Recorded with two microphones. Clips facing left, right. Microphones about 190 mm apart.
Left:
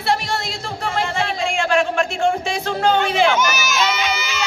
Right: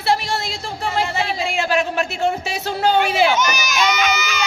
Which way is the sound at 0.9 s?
5° right (ahead or behind).